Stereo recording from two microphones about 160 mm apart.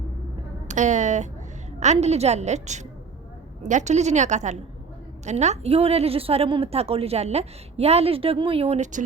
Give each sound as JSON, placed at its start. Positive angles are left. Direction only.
{"t": 0.7, "sound": "a woman's voice", "side_deg": -50}